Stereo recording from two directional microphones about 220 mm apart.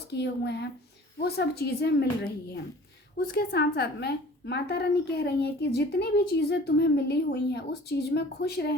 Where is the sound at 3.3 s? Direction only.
45° left (ahead or behind).